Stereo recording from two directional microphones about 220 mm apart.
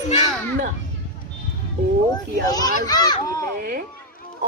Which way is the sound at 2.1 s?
15° left (ahead or behind).